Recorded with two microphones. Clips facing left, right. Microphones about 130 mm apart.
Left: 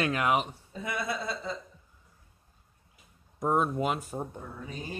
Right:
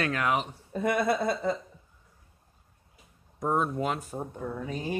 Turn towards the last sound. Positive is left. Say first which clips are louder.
# right 7 dB
turn(degrees=-70)  # may be behind; listen again after turning